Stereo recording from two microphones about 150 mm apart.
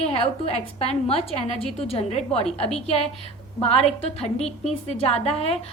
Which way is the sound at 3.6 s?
40° left (ahead or behind).